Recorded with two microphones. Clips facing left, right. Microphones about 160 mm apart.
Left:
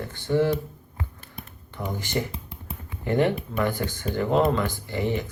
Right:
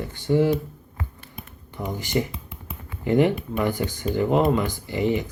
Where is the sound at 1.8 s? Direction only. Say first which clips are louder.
Right 3 dB; 15° right (ahead or behind).